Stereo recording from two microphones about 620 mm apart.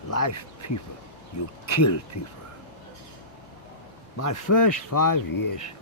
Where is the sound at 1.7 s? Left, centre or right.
Left.